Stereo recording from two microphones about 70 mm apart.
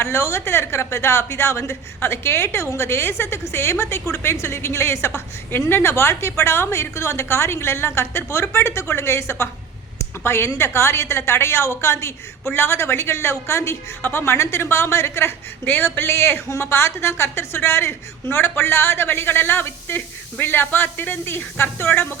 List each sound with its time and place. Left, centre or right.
0.0 s a woman's voice: left